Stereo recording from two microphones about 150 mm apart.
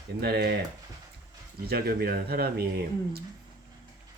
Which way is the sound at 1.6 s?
90° right.